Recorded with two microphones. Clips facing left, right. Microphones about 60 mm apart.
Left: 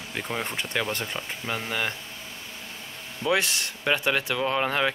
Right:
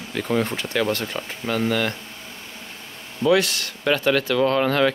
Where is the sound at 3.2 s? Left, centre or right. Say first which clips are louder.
Right 6 dB; left.